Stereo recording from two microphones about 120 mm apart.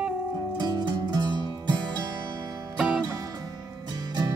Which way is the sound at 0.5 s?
35° right (ahead or behind).